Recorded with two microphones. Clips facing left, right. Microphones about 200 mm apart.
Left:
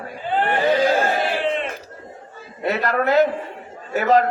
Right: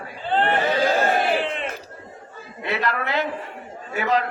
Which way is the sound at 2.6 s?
45° left (ahead or behind).